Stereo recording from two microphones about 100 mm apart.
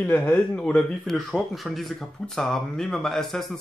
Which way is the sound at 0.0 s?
15° left (ahead or behind).